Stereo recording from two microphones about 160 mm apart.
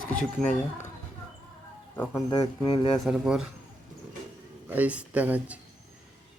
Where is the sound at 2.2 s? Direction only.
25° left (ahead or behind).